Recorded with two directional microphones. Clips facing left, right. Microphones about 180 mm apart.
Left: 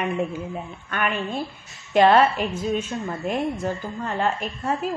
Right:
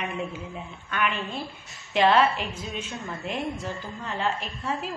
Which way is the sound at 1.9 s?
45° left (ahead or behind).